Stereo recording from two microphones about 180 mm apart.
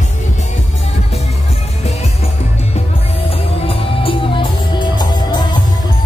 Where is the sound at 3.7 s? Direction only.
30° left (ahead or behind).